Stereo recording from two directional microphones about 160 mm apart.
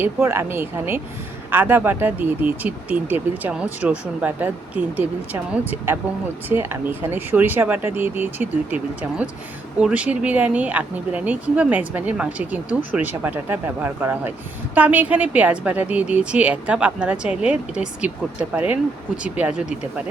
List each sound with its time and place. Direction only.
0.0 s a woman's voice: 15° right (ahead or behind)